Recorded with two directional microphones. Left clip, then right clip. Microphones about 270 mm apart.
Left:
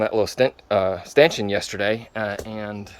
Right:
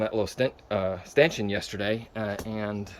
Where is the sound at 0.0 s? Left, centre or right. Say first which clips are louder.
Left 7 dB; centre.